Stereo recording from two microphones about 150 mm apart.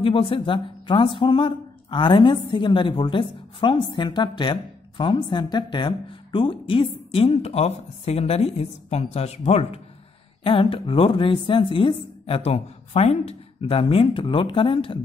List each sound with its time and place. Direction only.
0.0 s a woman's voice: 35° left (ahead or behind)